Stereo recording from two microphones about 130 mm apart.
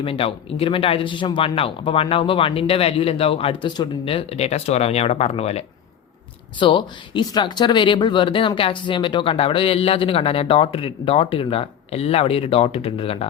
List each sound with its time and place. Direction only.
0.0 s speech: 45° left (ahead or behind)
6.6 s speech: 40° left (ahead or behind)